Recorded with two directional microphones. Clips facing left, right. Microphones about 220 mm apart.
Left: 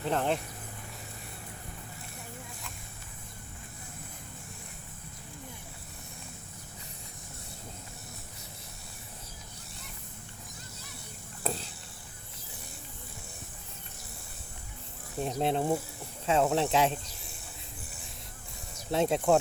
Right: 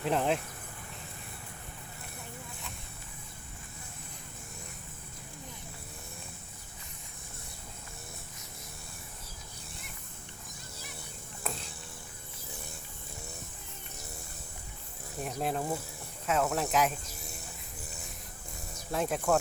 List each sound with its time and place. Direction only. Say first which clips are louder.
0.0 s speech: even; centre (ahead or behind)
11.4 s a sound: left 5 dB; 30° left (ahead or behind)
15.2 s speech: left 4 dB; 30° left (ahead or behind)
18.9 s speech: left 4 dB; 25° left (ahead or behind)